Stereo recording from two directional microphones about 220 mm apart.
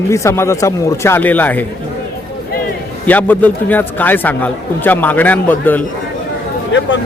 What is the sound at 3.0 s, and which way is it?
A man's voice, 10° left (ahead or behind).